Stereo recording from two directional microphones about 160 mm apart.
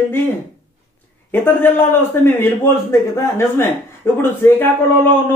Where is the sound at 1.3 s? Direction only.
15° left (ahead or behind).